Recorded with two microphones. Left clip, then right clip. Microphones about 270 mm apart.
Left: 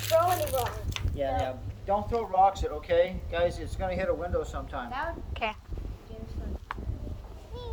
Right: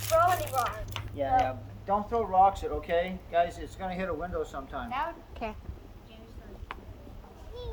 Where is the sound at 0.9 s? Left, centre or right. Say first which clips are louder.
Right 4 dB; right.